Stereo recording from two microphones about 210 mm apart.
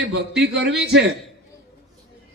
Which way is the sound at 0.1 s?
50° right (ahead or behind).